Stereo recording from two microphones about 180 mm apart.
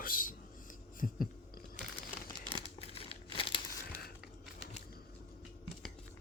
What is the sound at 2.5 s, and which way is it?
Crumpling, 30° left (ahead or behind).